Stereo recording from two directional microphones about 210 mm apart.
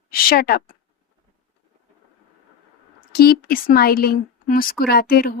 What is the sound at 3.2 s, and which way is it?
A woman's voice, 45° left (ahead or behind).